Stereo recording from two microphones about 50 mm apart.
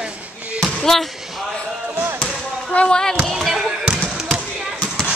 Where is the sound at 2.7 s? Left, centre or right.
Centre.